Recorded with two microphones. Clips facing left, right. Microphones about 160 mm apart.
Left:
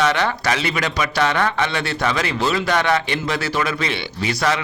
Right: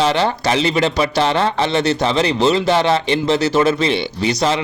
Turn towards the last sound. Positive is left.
turn(degrees=-25)  # may be behind; listen again after turning